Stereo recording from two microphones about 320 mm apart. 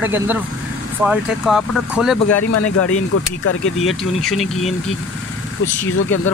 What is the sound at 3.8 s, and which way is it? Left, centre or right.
Speech, centre.